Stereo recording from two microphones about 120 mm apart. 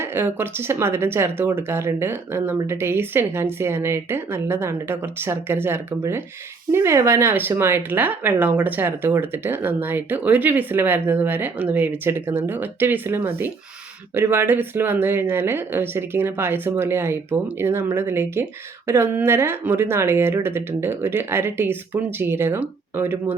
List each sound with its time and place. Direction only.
0.0 s speech: 20° right (ahead or behind)